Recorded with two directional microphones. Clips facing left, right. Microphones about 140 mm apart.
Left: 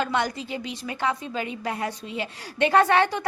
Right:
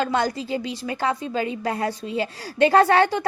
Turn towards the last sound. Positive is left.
turn(degrees=-35)  # may be behind; listen again after turning